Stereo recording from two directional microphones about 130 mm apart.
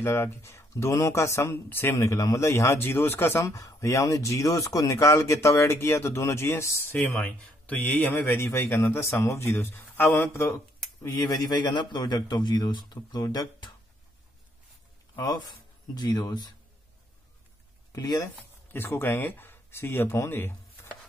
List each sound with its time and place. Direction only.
0.0 s speech: 20° left (ahead or behind)
7.1 s a man's voice: 5° left (ahead or behind); by 13.7 s 35° left (ahead or behind)
15.9 s a man's voice: 30° left (ahead or behind)
17.9 s speech: 30° left (ahead or behind)
18.7 s speech: 15° left (ahead or behind)